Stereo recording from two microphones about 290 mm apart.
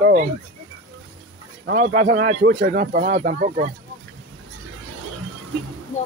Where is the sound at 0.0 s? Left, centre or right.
Right.